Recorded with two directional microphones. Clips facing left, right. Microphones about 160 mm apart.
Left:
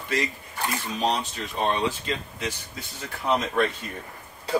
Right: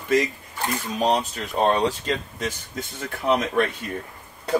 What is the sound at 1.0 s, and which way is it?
Speech, 40° right (ahead or behind).